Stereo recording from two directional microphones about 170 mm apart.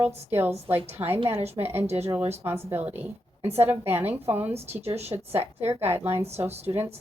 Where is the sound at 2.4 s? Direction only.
10° right (ahead or behind).